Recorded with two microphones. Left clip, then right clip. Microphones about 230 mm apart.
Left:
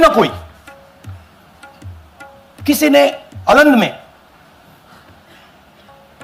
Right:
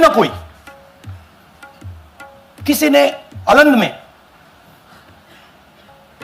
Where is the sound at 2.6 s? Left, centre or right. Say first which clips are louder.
Left 1 dB; centre.